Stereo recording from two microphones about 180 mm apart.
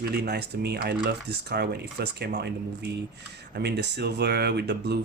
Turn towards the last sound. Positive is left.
turn(degrees=-65)  # may be behind; listen again after turning